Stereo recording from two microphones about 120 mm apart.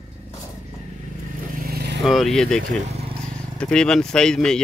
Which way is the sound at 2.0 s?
Centre (ahead or behind).